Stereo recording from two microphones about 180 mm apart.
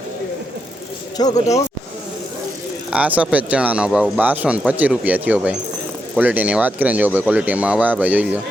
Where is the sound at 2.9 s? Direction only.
5° right (ahead or behind).